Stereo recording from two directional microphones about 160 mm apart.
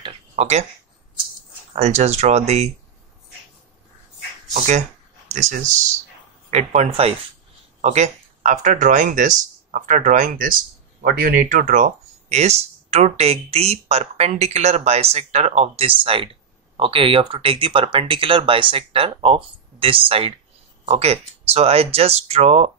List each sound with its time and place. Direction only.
0.0 s a sound: 40° right (ahead or behind)
1.7 s speech: 45° right (ahead or behind)
4.6 s speech: 50° right (ahead or behind)